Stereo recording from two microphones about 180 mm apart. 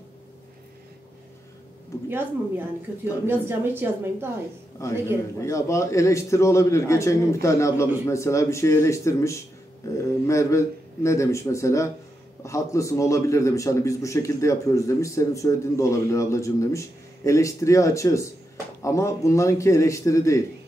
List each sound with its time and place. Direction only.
2.0 s a woman's voice: 10° right (ahead or behind)
4.8 s a man's voice: 15° left (ahead or behind)